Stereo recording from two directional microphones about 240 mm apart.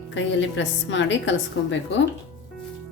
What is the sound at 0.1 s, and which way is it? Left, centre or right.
A woman's voice, left.